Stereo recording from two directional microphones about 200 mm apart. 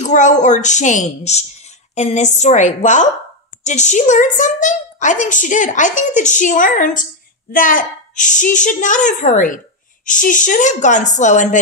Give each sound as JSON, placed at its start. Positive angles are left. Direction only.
{"t": 0.0, "sound": "a woman's voice", "side_deg": 35}